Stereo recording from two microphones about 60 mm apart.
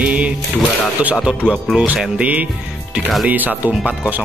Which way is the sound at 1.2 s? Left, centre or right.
Centre.